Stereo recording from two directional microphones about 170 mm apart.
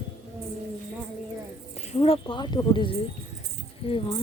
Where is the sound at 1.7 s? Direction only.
40° left (ahead or behind).